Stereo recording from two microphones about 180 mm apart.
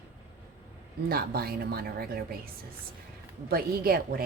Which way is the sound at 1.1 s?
60° right (ahead or behind).